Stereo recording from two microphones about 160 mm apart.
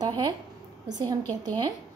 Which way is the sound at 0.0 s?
25° right (ahead or behind).